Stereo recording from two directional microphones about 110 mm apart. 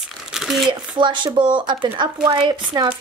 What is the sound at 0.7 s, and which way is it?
Speech, 45° right (ahead or behind).